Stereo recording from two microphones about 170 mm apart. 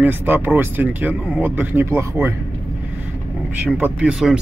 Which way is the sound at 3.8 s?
5° right (ahead or behind).